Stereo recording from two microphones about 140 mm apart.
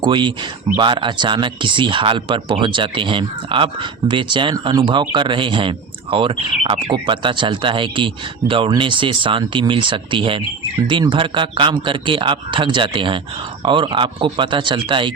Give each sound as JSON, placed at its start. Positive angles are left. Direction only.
{"t": 0.0, "sound": "speech", "side_deg": -35}